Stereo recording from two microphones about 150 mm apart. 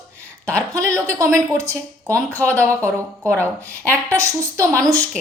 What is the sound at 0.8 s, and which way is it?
A woman's voice, 20° right (ahead or behind).